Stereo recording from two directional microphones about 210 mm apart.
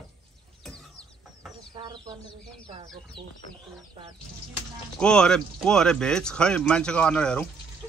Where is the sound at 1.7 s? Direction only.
20° right (ahead or behind).